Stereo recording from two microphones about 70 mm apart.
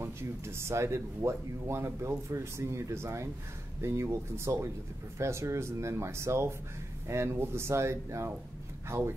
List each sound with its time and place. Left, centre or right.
0.0 s speech: right